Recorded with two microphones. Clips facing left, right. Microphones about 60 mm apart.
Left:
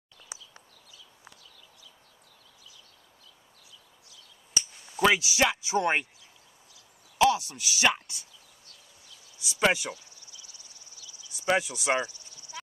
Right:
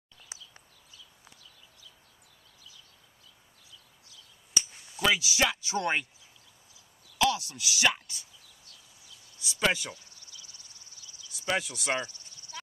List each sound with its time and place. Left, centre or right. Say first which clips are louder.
4.9 s speech: left 4 dB; left
7.2 s speech: left 4 dB; centre
9.4 s a sound: left 3 dB; centre
10.5 s a sound: left 1 dB; right
11.3 s speech: left 4 dB; centre
11.9 s speech: left 4 dB; left